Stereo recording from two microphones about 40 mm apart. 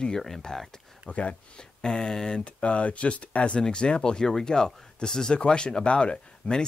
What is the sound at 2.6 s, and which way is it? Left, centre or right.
Speech, left.